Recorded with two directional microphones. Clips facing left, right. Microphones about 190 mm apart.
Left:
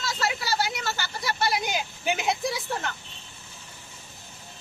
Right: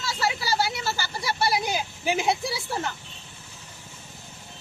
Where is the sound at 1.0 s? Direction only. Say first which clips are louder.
Right 1 dB; 30° right (ahead or behind).